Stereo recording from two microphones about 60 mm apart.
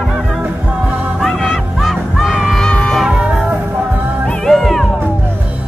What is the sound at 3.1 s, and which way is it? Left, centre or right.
Music, centre.